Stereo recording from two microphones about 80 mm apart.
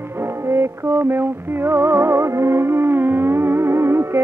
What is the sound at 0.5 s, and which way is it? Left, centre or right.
Music, right.